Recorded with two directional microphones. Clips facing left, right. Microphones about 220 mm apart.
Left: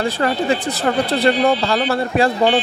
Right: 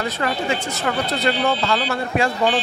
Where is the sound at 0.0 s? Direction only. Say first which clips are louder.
Left 5 dB; 35° left (ahead or behind).